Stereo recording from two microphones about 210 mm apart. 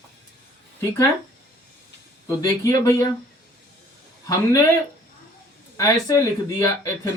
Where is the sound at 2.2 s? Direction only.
15° left (ahead or behind).